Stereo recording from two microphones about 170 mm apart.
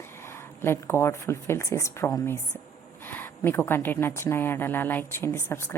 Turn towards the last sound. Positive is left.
turn(degrees=15)  # may be behind; listen again after turning